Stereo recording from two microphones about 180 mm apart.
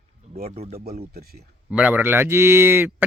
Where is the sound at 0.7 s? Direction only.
55° right (ahead or behind).